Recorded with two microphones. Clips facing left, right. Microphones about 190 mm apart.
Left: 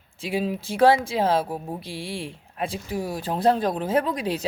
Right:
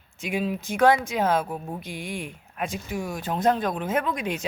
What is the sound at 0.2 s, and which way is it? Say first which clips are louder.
Speech: left 1 dB; 35° left (ahead or behind).